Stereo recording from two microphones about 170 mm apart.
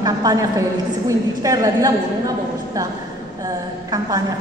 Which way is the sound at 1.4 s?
20° right (ahead or behind).